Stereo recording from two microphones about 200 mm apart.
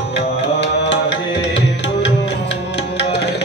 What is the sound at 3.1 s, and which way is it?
Tabla, 55° left (ahead or behind).